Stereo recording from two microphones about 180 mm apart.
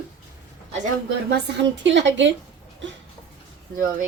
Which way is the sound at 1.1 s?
75° right (ahead or behind).